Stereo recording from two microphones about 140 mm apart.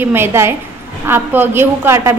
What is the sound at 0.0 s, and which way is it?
A woman's voice, 15° right (ahead or behind).